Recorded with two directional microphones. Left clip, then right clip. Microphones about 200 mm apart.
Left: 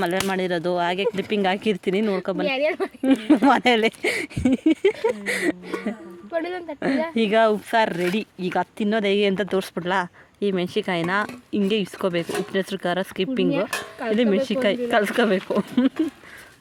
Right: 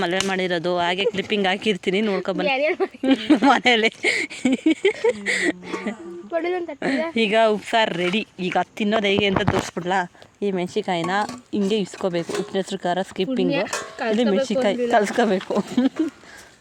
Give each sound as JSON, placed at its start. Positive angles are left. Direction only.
{"t": 0.3, "sound": "speech", "side_deg": 5}
{"t": 2.5, "sound": "speech", "side_deg": -35}
{"t": 3.0, "sound": "speech", "side_deg": 15}
{"t": 6.3, "sound": "speech", "side_deg": -35}
{"t": 6.7, "sound": "speech", "side_deg": 15}